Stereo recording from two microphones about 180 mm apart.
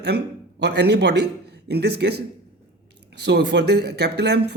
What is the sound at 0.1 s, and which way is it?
A man's voice, 65° right (ahead or behind).